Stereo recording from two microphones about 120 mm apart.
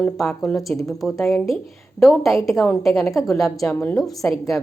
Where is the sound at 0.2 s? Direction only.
Centre (ahead or behind).